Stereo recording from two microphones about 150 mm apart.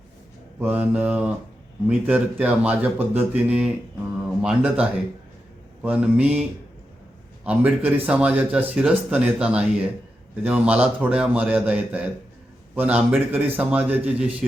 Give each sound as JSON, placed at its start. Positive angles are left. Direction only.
{"t": 0.6, "sound": "speech", "side_deg": -10}
{"t": 7.4, "sound": "speech", "side_deg": -10}